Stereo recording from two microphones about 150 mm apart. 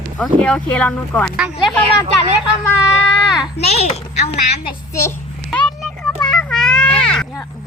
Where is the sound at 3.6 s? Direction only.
45° left (ahead or behind).